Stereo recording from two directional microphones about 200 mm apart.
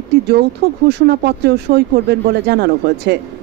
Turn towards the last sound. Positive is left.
turn(degrees=-55)  # may be behind; listen again after turning